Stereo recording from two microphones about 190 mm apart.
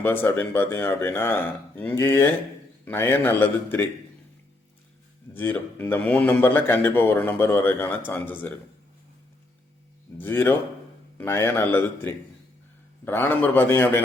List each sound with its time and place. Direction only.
0.0 s a man's voice: 10° left (ahead or behind)
5.3 s a man's voice: 10° left (ahead or behind)
10.2 s a man's voice: 10° left (ahead or behind)